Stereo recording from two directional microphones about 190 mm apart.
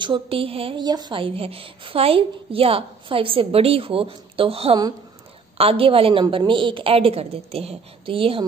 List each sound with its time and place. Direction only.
0.0 s speech: 25° right (ahead or behind)